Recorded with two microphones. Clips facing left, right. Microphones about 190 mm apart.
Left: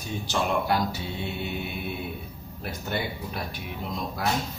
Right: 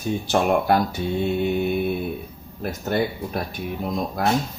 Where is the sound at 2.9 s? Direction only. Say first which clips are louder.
Right 8 dB; 50° right (ahead or behind).